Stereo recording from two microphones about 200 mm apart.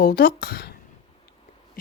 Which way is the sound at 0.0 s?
50° left (ahead or behind).